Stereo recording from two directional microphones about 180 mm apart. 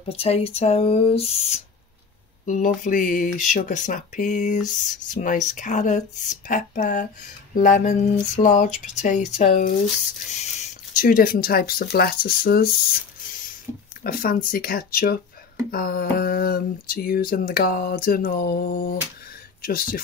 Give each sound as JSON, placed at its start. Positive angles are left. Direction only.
{"t": 0.1, "sound": "speech", "side_deg": 35}
{"t": 2.4, "sound": "speech", "side_deg": 45}
{"t": 14.0, "sound": "speech", "side_deg": 55}